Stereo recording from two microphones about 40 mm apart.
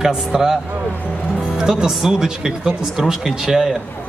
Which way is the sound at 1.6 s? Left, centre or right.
Centre.